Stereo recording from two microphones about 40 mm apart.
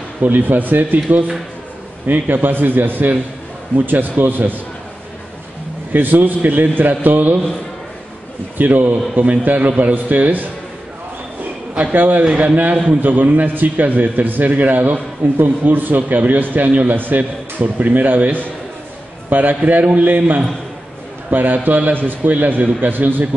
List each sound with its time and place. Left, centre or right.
0.2 s a man's voice: right
2.0 s a man's voice: right
5.9 s a man's voice: right
8.5 s a man's voice: right
11.9 s a man's voice: right
12.4 s a man's voice: right
12.8 s a man's voice: right